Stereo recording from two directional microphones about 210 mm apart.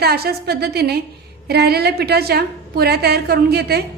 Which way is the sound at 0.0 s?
50° right (ahead or behind).